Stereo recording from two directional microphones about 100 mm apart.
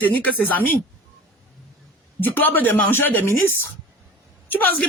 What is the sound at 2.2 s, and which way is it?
Speech, 20° left (ahead or behind).